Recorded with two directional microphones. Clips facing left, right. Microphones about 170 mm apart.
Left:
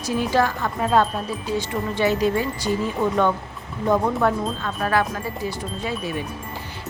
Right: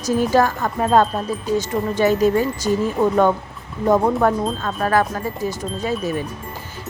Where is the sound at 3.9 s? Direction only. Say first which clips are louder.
Right 4 dB; 40° right (ahead or behind).